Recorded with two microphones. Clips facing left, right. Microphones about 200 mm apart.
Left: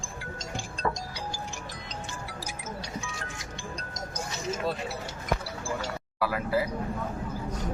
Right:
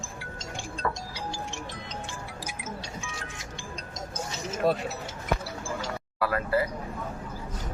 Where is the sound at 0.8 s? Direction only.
25° left (ahead or behind).